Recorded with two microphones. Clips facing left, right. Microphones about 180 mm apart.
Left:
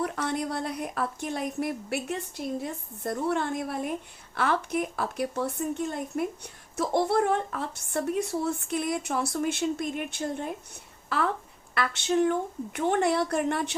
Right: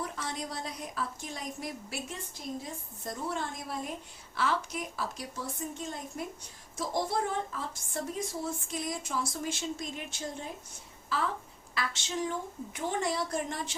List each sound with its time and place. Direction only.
0.0 s speech: 60° left (ahead or behind)